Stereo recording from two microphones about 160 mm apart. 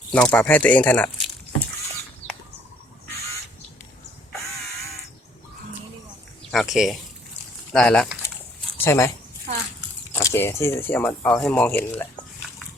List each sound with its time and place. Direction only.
0.1 s speech: 10° left (ahead or behind)
6.5 s speech: centre (ahead or behind)
8.8 s speech: 15° left (ahead or behind)